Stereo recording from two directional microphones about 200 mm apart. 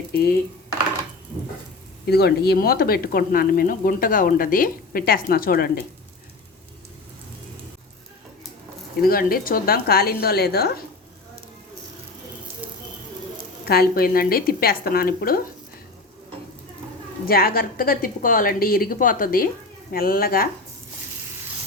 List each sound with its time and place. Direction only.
0.1 s speech: 50° left (ahead or behind)
2.0 s speech: 55° left (ahead or behind)
9.0 s speech: 45° left (ahead or behind)
13.7 s speech: 50° left (ahead or behind)
17.2 s speech: 50° left (ahead or behind)